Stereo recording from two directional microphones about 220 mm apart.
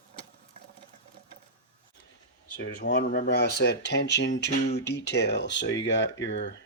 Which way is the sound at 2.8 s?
45° left (ahead or behind).